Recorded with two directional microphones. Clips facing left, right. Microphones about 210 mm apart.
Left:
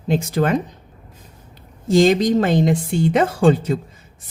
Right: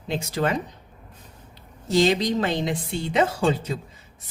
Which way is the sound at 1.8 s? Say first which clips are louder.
Left 6 dB; 50° left (ahead or behind).